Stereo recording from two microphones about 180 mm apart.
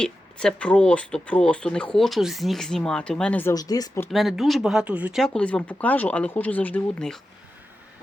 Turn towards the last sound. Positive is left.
turn(degrees=5)  # may be behind; listen again after turning